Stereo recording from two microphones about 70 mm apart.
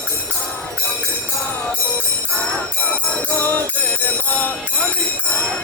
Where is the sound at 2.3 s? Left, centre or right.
Centre.